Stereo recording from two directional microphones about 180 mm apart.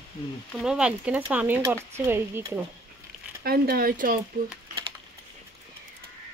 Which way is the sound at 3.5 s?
55° right (ahead or behind).